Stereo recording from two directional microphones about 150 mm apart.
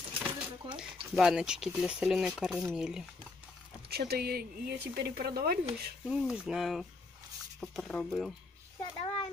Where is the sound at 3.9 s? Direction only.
90° right.